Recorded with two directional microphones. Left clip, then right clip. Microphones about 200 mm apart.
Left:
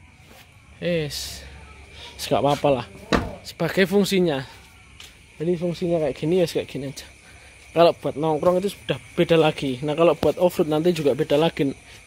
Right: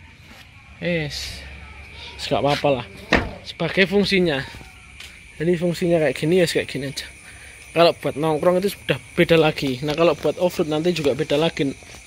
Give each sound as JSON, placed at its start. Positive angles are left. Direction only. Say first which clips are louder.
{"t": 0.7, "sound": "a man's voice", "louder": "even", "side_deg": 5}
{"t": 5.4, "sound": "speech", "louder": "right 3 dB", "side_deg": -5}